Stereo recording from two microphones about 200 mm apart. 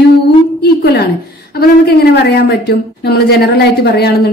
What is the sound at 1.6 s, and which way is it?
A woman's voice, 55° left (ahead or behind).